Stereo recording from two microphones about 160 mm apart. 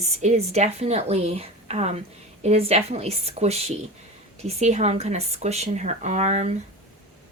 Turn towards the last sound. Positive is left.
turn(degrees=-45)  # may be behind; listen again after turning